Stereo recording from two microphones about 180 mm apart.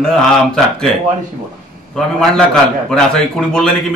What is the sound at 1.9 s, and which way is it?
A man's voice, 5° left (ahead or behind).